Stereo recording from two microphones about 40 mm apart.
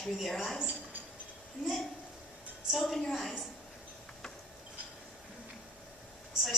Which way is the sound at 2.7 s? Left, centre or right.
Centre.